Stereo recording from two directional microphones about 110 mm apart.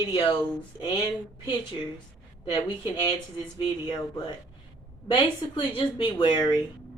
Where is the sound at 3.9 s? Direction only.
40° left (ahead or behind).